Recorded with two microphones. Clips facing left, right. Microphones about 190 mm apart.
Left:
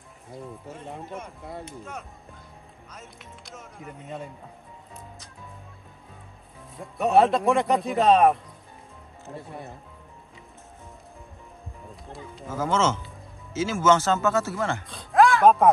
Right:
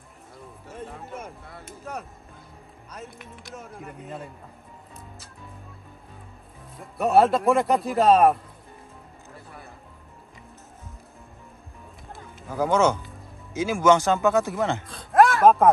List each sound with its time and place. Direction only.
3.0 s a man's voice: centre (ahead or behind)
6.8 s a man's voice: centre (ahead or behind)
9.5 s speech: 20° left (ahead or behind)
12.4 s speech: 15° right (ahead or behind)
14.9 s a sound: centre (ahead or behind)